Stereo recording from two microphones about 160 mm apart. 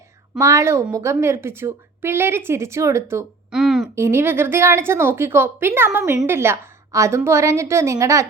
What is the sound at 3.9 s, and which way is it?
A woman's voice, 15° right (ahead or behind).